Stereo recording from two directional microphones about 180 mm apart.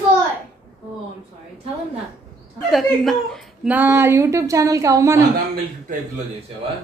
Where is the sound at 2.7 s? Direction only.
Centre (ahead or behind); by 5.2 s 15° right (ahead or behind).